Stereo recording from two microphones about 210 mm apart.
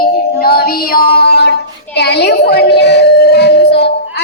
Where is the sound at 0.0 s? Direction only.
45° left (ahead or behind).